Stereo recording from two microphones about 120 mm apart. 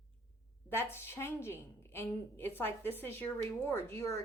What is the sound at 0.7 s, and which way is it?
A woman's voice, 20° left (ahead or behind).